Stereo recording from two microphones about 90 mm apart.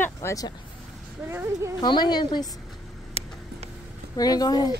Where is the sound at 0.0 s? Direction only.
30° left (ahead or behind).